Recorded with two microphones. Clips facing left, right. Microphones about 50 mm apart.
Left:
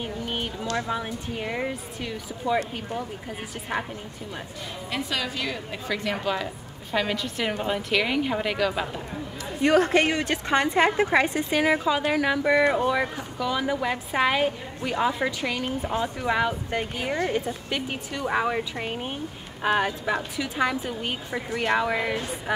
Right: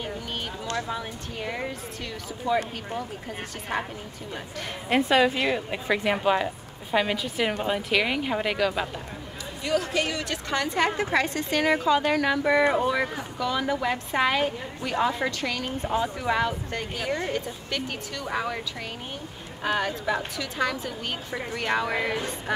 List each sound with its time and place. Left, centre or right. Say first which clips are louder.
0.2 s a sound: left 4 dB; centre
0.7 s a woman's voice: left 3 dB; centre
3.7 s speech: even; centre
4.8 s a woman's voice: right 9 dB; right; by 8.8 s centre
9.6 s a woman's voice: left 6 dB; left; by 16.5 s centre
16.7 s a woman's voice: left 2 dB; centre